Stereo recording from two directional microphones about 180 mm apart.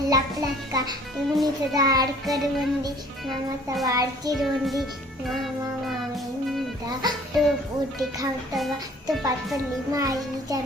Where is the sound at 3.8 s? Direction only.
20° right (ahead or behind).